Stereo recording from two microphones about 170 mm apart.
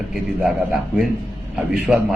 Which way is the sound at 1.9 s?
5° right (ahead or behind).